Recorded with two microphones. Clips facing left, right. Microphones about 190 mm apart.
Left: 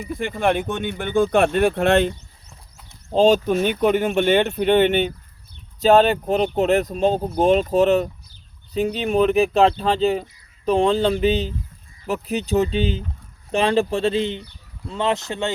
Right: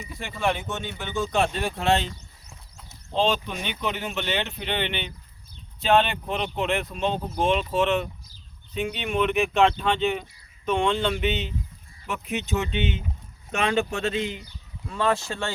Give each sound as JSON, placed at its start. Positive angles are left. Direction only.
{"t": 0.0, "sound": "speech", "side_deg": 55}
{"t": 3.1, "sound": "speech", "side_deg": 45}